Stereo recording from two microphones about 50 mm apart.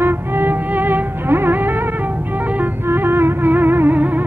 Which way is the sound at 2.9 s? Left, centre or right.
Right.